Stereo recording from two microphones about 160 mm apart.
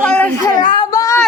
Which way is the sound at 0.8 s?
20° left (ahead or behind).